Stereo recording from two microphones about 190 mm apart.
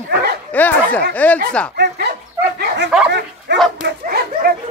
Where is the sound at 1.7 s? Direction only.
55° right (ahead or behind).